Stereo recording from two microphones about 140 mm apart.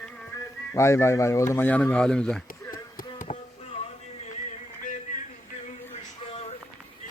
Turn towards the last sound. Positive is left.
turn(degrees=45)  # may be behind; listen again after turning